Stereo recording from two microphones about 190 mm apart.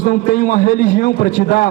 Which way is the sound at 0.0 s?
45° left (ahead or behind).